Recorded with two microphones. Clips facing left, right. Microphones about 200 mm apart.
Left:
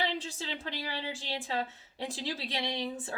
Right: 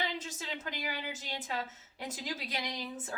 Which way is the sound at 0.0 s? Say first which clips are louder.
Left 4 dB; 30° left (ahead or behind).